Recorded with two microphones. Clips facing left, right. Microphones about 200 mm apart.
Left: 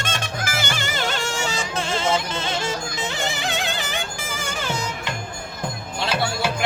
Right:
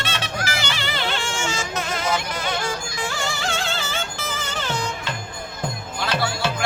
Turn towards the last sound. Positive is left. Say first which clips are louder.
# even
turn(degrees=10)  # may be behind; listen again after turning